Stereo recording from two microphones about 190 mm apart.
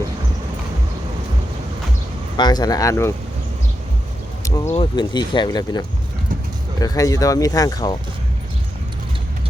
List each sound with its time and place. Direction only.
2.4 s speech: 20° left (ahead or behind)
4.4 s speech: 15° left (ahead or behind)